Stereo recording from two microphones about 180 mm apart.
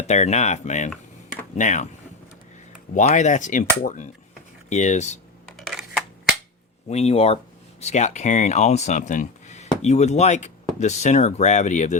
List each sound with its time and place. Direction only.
0.1 s speech: 40° left (ahead or behind)
2.9 s speech: 40° left (ahead or behind)
5.5 s a sound: centre (ahead or behind)
6.8 s speech: 35° left (ahead or behind)